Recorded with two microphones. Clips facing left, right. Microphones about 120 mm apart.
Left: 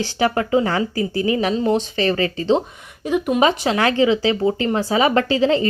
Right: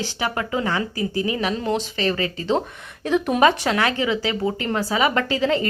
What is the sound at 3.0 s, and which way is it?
Speech, 10° left (ahead or behind).